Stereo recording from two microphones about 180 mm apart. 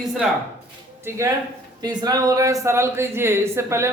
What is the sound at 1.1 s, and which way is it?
Speech, 15° right (ahead or behind).